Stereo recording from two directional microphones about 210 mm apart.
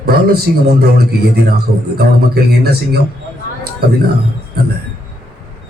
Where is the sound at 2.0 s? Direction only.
50° right (ahead or behind).